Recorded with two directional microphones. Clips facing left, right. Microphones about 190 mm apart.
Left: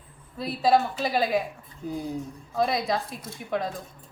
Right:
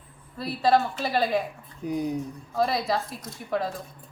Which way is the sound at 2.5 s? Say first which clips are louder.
Even; centre (ahead or behind).